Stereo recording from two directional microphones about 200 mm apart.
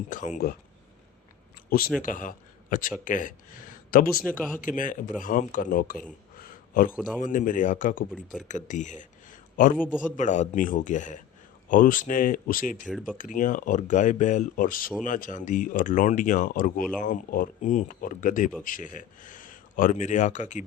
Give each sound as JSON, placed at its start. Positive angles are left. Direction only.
{"t": 0.1, "sound": "speech", "side_deg": 40}
{"t": 2.0, "sound": "a man's voice", "side_deg": 40}
{"t": 4.2, "sound": "speech", "side_deg": 5}
{"t": 4.6, "sound": "speech", "side_deg": 40}
{"t": 6.4, "sound": "a sound", "side_deg": 45}
{"t": 7.2, "sound": "speech", "side_deg": 40}
{"t": 8.1, "sound": "speech", "side_deg": 0}
{"t": 8.4, "sound": "speech", "side_deg": 40}
{"t": 12.8, "sound": "speech", "side_deg": 5}
{"t": 13.1, "sound": "speech", "side_deg": 40}